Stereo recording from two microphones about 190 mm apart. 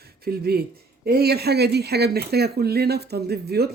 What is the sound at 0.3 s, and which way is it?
Speech, 55° right (ahead or behind).